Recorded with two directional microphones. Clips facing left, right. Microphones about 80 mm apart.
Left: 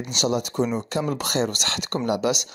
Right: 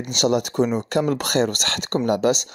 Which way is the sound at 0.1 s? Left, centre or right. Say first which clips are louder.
Right 4 dB; right.